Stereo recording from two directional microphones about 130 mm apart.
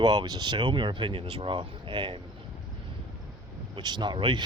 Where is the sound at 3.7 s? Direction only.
35° right (ahead or behind).